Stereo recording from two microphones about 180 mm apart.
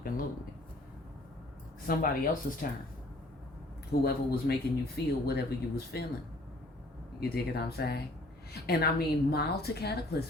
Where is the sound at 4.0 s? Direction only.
60° left (ahead or behind).